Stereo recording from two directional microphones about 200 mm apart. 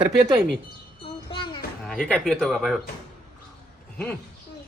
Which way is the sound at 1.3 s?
25° left (ahead or behind).